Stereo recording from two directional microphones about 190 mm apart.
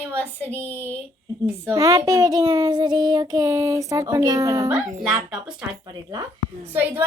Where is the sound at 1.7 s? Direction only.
20° right (ahead or behind).